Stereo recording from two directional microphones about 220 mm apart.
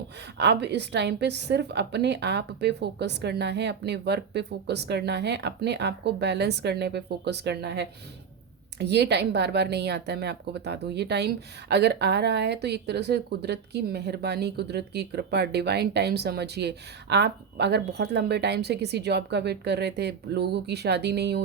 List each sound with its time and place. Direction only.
0.3 s a woman's voice: 50° right (ahead or behind)